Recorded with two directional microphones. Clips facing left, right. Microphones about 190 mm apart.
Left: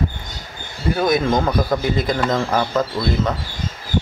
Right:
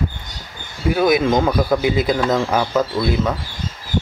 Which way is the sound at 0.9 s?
10° right (ahead or behind).